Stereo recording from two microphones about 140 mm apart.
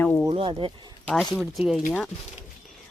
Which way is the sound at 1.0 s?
5° left (ahead or behind).